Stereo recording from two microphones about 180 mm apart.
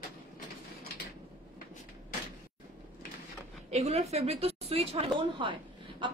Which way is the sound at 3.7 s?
35° right (ahead or behind).